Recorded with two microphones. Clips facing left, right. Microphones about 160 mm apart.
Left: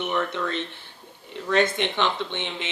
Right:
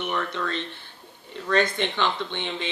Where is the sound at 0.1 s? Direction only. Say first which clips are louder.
Left 2 dB; 15° left (ahead or behind).